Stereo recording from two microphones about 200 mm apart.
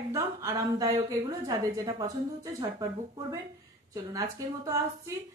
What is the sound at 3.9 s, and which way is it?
Speech, 15° right (ahead or behind).